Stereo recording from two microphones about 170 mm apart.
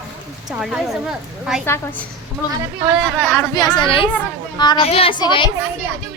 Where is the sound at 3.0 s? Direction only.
10° left (ahead or behind); by 5.5 s 25° left (ahead or behind).